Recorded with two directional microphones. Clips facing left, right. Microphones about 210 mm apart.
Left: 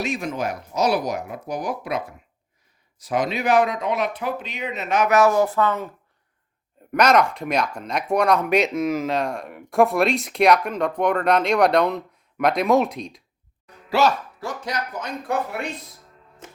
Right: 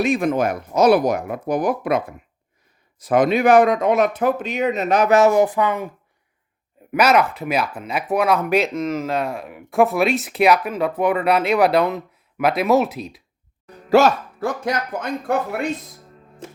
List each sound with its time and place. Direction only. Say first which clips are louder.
0.0 s speech: right 7 dB; 55° right (ahead or behind); by 5.9 s 15° right (ahead or behind)
6.9 s speech: right 1 dB; 5° right (ahead or behind)
13.9 s speech: right 5 dB; 50° right (ahead or behind)